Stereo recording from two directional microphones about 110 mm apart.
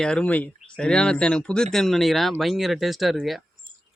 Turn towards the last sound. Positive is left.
turn(degrees=0)  # may be behind; listen again after turning